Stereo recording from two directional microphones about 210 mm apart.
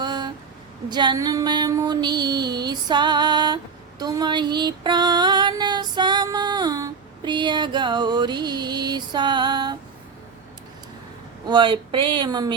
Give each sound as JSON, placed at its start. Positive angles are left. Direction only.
{"t": 0.0, "sound": "a sound", "side_deg": -20}
{"t": 0.9, "sound": "female singing", "side_deg": -20}
{"t": 11.4, "sound": "speech", "side_deg": -20}